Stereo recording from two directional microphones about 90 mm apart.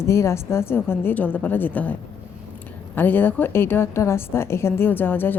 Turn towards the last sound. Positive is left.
turn(degrees=25)  # may be behind; listen again after turning